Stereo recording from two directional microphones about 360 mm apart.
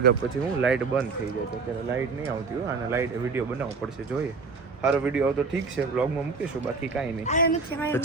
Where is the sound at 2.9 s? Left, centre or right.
Centre.